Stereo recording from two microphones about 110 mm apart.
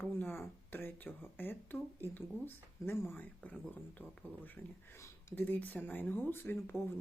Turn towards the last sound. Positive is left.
turn(degrees=20)  # may be behind; listen again after turning